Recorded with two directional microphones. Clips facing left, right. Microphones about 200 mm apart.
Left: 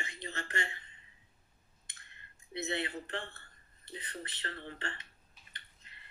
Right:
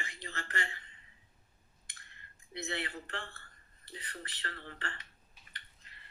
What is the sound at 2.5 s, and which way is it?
Speech, 20° left (ahead or behind).